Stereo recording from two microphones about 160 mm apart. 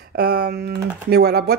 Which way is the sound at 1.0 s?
90° right.